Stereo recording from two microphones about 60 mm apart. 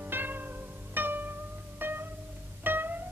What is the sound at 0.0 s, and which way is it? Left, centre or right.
Music, right.